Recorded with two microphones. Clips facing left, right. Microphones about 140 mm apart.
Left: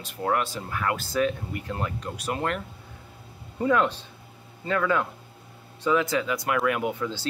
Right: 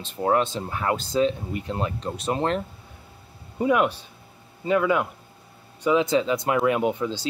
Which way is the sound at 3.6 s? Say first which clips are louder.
Right 2 dB; 15° right (ahead or behind).